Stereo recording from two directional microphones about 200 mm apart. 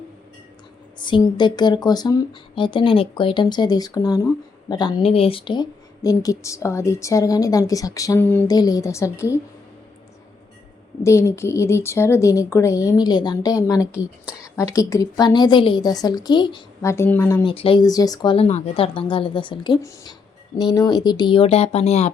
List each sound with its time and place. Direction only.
0.9 s a woman's voice: 25° left (ahead or behind)
11.0 s a woman's voice: 15° left (ahead or behind)
17.4 s speech: 25° left (ahead or behind)